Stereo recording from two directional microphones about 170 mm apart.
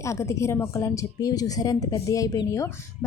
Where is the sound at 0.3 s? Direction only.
15° left (ahead or behind).